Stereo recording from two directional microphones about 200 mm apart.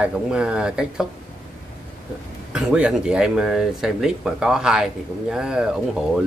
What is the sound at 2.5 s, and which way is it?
Speech, 5° right (ahead or behind).